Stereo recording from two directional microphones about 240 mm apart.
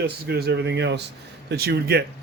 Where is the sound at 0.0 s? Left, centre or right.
Right.